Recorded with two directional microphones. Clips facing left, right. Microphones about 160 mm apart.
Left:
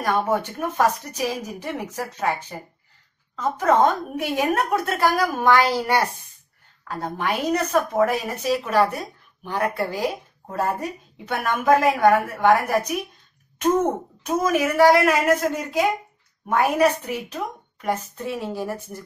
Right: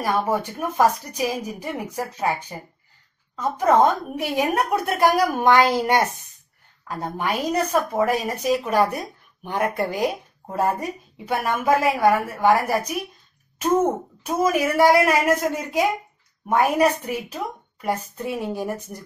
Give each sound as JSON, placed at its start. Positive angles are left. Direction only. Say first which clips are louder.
{"t": 0.0, "sound": "a woman's voice", "louder": "even", "side_deg": -10}
{"t": 14.2, "sound": "a woman's voice", "louder": "even", "side_deg": -10}